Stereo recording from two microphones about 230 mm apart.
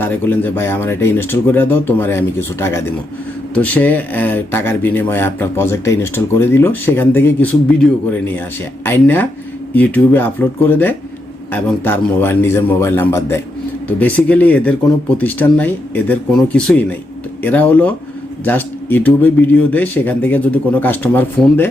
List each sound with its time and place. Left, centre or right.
0.0 s speech: centre